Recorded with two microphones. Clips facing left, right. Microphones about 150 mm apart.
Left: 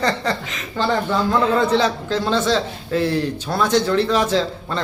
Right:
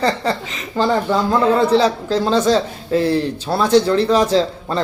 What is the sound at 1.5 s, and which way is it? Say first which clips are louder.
A man's voice: right 3 dB; 35° right (ahead or behind).